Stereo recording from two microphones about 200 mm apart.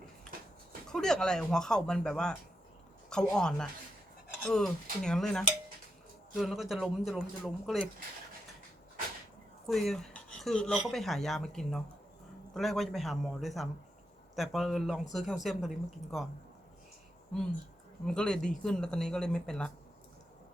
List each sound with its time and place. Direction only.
0.9 s speech: 5° left (ahead or behind)
9.6 s speech: centre (ahead or behind)
18.0 s speech: 5° left (ahead or behind)